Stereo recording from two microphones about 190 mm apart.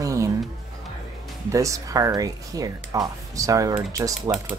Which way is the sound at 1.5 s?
15° right (ahead or behind).